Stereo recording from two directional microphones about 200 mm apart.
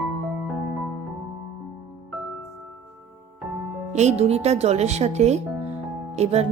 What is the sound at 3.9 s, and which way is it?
A woman's voice, 35° right (ahead or behind).